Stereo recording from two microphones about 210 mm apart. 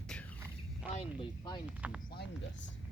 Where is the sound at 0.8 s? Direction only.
5° right (ahead or behind).